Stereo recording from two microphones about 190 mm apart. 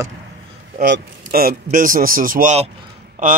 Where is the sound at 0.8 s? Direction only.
55° right (ahead or behind).